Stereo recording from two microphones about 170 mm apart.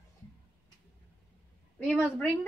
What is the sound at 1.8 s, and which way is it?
Speech, 5° left (ahead or behind).